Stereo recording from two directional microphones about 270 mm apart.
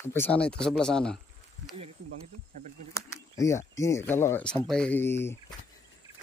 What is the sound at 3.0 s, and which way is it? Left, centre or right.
Speech, centre.